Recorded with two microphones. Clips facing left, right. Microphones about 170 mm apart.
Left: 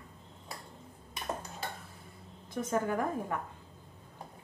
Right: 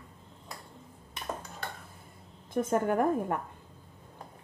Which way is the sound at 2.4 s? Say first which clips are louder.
Right 4 dB; 50° right (ahead or behind).